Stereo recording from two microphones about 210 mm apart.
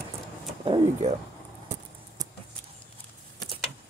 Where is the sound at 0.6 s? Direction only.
30° right (ahead or behind).